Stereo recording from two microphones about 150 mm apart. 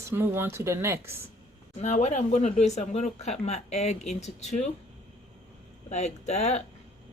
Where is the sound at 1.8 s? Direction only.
50° left (ahead or behind).